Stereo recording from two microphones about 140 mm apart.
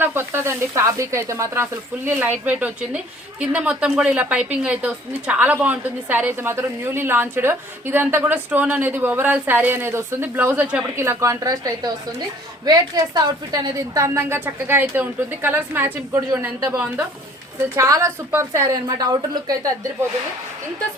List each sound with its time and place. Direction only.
0.0 s a woman's voice: 15° right (ahead or behind)